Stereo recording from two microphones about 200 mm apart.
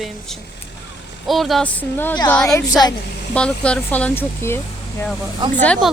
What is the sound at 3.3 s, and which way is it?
Speech, 5° left (ahead or behind).